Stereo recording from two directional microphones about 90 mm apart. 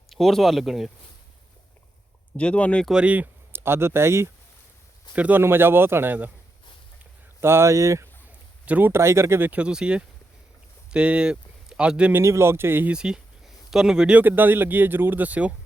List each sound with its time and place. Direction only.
0.1 s speech: centre (ahead or behind)
2.3 s speech: 15° left (ahead or behind)
2.8 s speech: 10° right (ahead or behind); by 4.3 s 30° right (ahead or behind)
5.1 s speech: 20° right (ahead or behind)
7.4 s speech: 30° right (ahead or behind)
8.6 s speech: 15° right (ahead or behind)
8.9 s speech: 30° right (ahead or behind)
9.5 s speech: 10° right (ahead or behind)
12.1 s speech: 30° right (ahead or behind)
12.9 s speech: 10° right (ahead or behind)